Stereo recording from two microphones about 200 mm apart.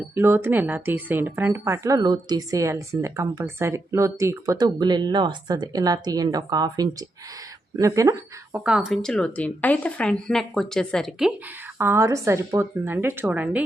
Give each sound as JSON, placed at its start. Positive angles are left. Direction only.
{"t": 0.1, "sound": "speech", "side_deg": -10}
{"t": 8.6, "sound": "speech", "side_deg": -5}
{"t": 11.8, "sound": "speech", "side_deg": -15}